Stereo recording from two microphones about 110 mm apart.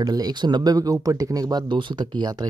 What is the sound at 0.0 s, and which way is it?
Speech, 35° right (ahead or behind).